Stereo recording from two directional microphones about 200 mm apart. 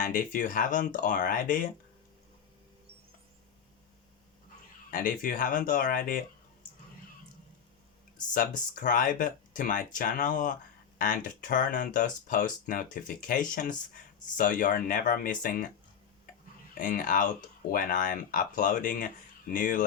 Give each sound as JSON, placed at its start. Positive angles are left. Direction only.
{"t": 0.0, "sound": "speech", "side_deg": 45}
{"t": 4.9, "sound": "speech", "side_deg": 45}
{"t": 8.3, "sound": "speech", "side_deg": 40}
{"t": 16.7, "sound": "speech", "side_deg": 45}